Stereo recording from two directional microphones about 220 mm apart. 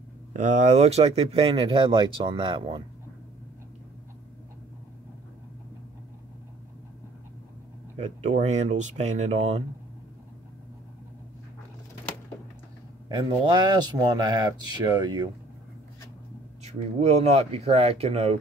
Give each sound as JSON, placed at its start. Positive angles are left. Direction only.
{"t": 0.3, "sound": "speech", "side_deg": -35}
{"t": 8.0, "sound": "speech", "side_deg": -30}
{"t": 13.2, "sound": "speech", "side_deg": -20}
{"t": 16.6, "sound": "speech", "side_deg": -30}